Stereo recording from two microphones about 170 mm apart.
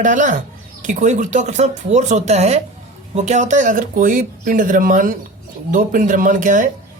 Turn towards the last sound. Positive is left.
turn(degrees=-50)  # may be behind; listen again after turning